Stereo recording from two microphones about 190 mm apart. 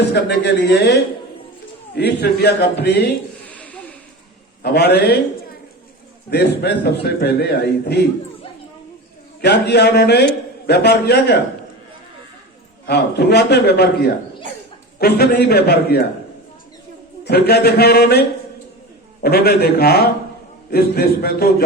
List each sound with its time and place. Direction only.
0.1 s a man's voice: 60° left (ahead or behind)
2.0 s a man's voice: 60° left (ahead or behind)
3.4 s a sound: 5° left (ahead or behind)
4.6 s a man's voice: 55° left (ahead or behind)
6.3 s a man's voice: 60° left (ahead or behind)
9.4 s a man's voice: 60° left (ahead or behind)
12.8 s a man's voice: 60° left (ahead or behind)
14.9 s a man's voice: 55° left (ahead or behind)
17.2 s a man's voice: 55° left (ahead or behind)